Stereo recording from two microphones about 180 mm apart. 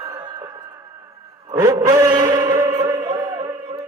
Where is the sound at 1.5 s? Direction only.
20° right (ahead or behind).